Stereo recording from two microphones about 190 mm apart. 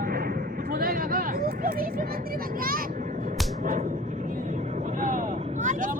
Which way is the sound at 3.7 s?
40° right (ahead or behind).